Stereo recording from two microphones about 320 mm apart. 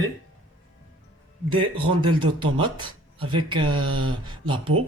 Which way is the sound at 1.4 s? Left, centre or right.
Centre.